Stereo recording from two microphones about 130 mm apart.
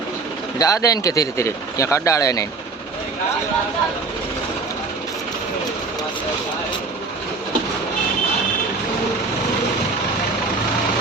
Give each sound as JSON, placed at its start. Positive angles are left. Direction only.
{"t": 0.6, "sound": "speech", "side_deg": 25}